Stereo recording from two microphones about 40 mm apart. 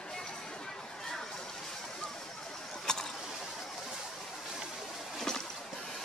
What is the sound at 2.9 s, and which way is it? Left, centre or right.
Vehicle, centre.